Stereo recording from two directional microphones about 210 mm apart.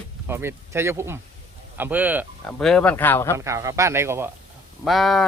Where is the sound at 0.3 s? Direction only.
10° right (ahead or behind).